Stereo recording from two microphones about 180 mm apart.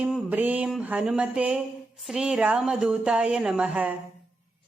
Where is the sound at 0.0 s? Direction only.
10° right (ahead or behind).